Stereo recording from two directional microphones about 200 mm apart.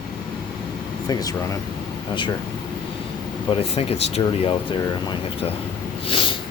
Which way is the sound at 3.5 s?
30° left (ahead or behind).